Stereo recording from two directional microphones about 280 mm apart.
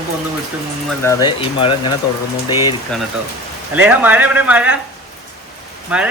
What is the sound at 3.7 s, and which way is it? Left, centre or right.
Speech, centre.